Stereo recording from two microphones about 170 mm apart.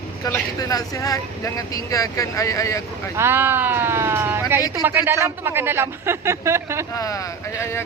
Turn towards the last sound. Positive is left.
turn(degrees=15)  # may be behind; listen again after turning